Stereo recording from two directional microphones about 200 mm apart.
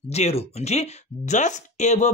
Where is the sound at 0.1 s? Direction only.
30° left (ahead or behind).